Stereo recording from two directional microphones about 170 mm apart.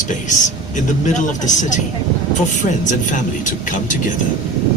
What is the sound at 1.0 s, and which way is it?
Speech, 45° left (ahead or behind).